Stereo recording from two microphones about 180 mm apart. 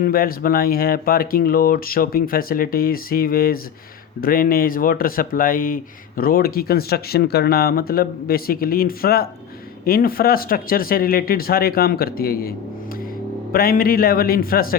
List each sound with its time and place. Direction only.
0.0 s speech: 55° left (ahead or behind)